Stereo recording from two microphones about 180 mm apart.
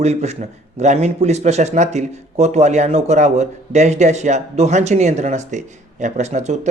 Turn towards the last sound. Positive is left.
turn(degrees=-40)  # may be behind; listen again after turning